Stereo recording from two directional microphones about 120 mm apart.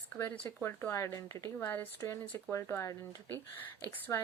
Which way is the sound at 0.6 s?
20° left (ahead or behind).